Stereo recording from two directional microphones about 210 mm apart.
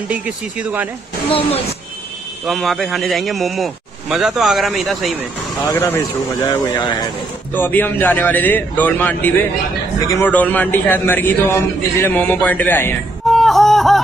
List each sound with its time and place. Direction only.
0.1 s a man's voice: 5° right (ahead or behind)
2.4 s a man's voice: centre (ahead or behind)